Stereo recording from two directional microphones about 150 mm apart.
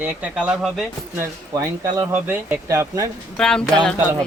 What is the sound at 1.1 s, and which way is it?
Speech, 20° right (ahead or behind).